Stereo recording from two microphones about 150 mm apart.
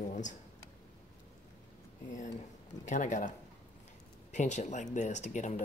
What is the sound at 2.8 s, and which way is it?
Speech, 55° left (ahead or behind).